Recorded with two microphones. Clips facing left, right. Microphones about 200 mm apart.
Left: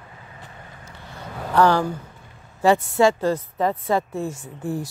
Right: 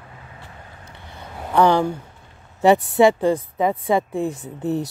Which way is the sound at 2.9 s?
15° right (ahead or behind).